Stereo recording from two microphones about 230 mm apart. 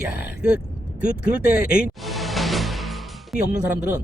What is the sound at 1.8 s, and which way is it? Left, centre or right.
Music, centre.